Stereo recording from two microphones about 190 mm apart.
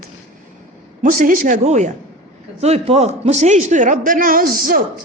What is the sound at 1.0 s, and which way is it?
A man's voice, 45° right (ahead or behind).